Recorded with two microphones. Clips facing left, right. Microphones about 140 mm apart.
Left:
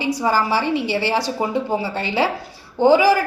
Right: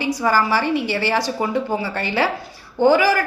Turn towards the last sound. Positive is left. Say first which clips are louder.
# left 1 dB
turn(degrees=20)  # may be behind; listen again after turning